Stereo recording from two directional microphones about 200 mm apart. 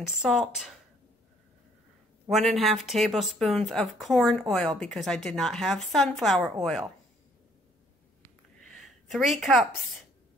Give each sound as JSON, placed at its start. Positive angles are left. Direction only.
{"t": 0.0, "sound": "speech", "side_deg": 0}
{"t": 2.2, "sound": "speech", "side_deg": 0}
{"t": 8.8, "sound": "a woman's voice", "side_deg": 0}